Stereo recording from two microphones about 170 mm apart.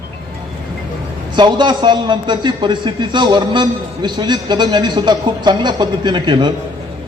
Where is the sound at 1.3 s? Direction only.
25° right (ahead or behind).